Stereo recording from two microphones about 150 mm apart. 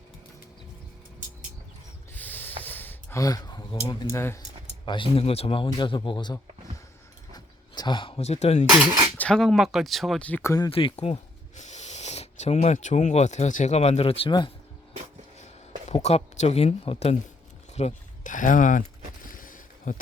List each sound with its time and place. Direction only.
2.1 s a sound: 10° left (ahead or behind); by 3.8 s 30° left (ahead or behind)
3.8 s speech: 20° left (ahead or behind)
4.9 s a man's voice: 35° left (ahead or behind)
7.3 s a sound: 30° left (ahead or behind); by 8.6 s 45° left (ahead or behind)
8.9 s speech: 30° right (ahead or behind)
9.1 s speech: 5° left (ahead or behind)
10.7 s speech: 40° left (ahead or behind)
15.9 s speech: 50° left (ahead or behind)
17.7 s speech: 55° left (ahead or behind)
19.2 s a sound: 65° left (ahead or behind)